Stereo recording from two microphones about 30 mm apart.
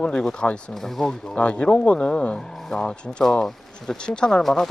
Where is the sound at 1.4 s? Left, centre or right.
Left.